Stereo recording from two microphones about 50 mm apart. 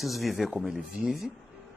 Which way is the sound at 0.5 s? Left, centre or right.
Centre.